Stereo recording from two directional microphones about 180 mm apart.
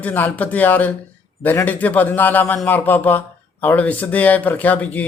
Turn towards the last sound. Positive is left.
turn(degrees=10)  # may be behind; listen again after turning